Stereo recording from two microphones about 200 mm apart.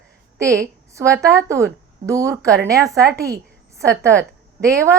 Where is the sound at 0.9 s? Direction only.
15° right (ahead or behind).